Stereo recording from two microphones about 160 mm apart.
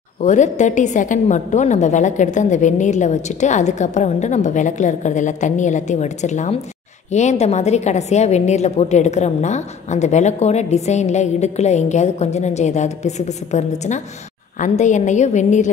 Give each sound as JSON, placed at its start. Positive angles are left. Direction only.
{"t": 0.2, "sound": "a woman's voice", "side_deg": 50}